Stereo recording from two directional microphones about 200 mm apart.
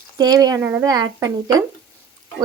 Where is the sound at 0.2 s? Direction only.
20° right (ahead or behind).